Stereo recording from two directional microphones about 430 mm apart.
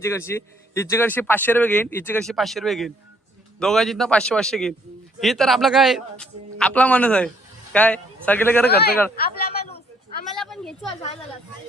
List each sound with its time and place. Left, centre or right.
0.0 s speech: centre
8.7 s speech: left
10.3 s a sound: centre